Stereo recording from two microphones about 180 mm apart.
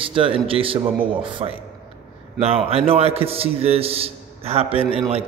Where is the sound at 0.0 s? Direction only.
30° right (ahead or behind).